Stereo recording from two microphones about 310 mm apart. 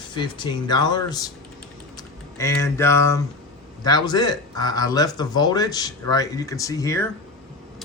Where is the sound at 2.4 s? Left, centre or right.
Centre.